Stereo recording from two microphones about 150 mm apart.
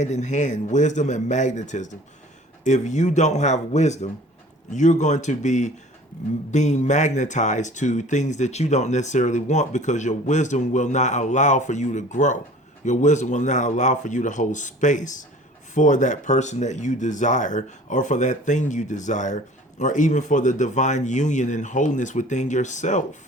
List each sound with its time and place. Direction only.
0.0 s speech: 50° left (ahead or behind)